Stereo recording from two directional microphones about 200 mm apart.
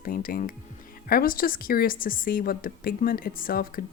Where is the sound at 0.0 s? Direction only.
45° left (ahead or behind).